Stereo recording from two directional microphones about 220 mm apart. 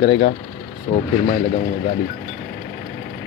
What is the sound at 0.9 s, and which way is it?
Speech, 35° left (ahead or behind).